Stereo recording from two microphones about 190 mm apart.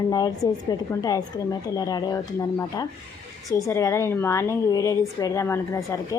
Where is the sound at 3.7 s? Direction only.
15° left (ahead or behind).